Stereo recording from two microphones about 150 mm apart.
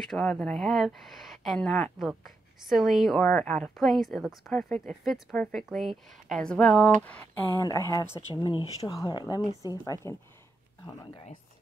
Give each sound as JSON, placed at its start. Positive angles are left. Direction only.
{"t": 0.0, "sound": "a woman's voice", "side_deg": 5}
{"t": 7.6, "sound": "speech", "side_deg": 25}